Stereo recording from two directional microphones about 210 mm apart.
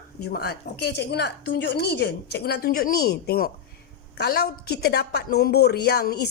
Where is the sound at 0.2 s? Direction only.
50° left (ahead or behind).